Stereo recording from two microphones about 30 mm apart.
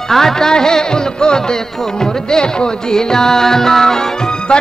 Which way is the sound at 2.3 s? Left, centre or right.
Left.